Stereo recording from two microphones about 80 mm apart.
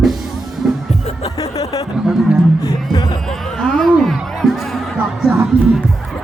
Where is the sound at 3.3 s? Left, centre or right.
Centre.